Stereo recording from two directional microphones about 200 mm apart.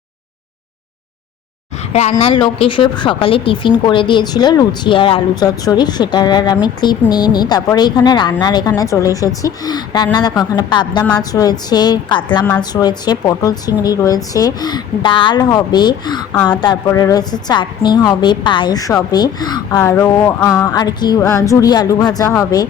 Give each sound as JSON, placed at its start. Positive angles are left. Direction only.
{"t": 1.9, "sound": "speech", "side_deg": 35}